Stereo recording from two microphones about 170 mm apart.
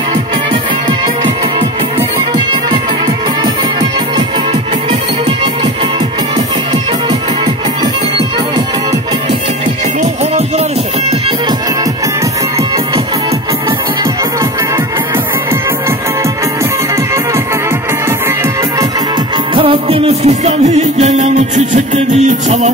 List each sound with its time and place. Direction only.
2.0 s music: 25° right (ahead or behind)
19.5 s music: 30° right (ahead or behind)